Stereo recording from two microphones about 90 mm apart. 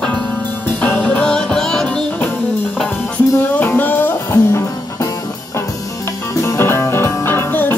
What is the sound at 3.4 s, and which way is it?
Music, 20° left (ahead or behind).